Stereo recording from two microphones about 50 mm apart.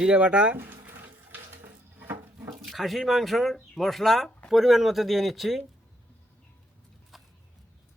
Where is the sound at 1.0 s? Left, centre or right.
Right.